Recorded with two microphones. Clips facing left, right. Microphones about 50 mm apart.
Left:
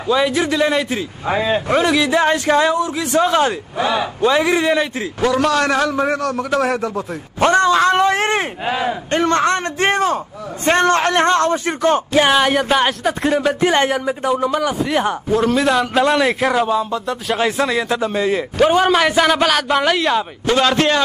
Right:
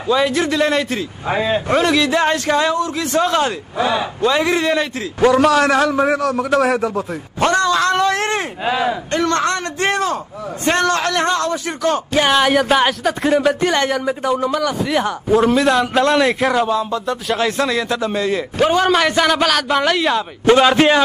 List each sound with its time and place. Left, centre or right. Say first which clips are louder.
0.1 s a man's voice: even; centre
5.4 s a man's voice: right 3 dB; centre
7.5 s cat: left 3 dB; left
8.6 s a sound: right 4 dB; centre
9.1 s a man's voice: left 4 dB; left
12.1 s a man's voice: right 2 dB; centre
13.7 s a man's voice: left 1 dB; centre
14.0 s a man's voice: even; centre
14.5 s a man's voice: even; centre
14.8 s a man's voice: even; centre
15.2 s a man's voice: right 4 dB; centre
20.5 s a man's voice: right 2 dB; centre